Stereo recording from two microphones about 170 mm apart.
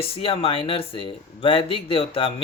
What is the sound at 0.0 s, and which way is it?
Speech, 35° left (ahead or behind).